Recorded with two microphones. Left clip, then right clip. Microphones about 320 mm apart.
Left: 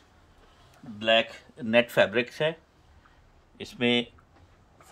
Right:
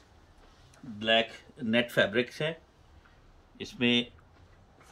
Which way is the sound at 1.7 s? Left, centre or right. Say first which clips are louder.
Left 5 dB; centre.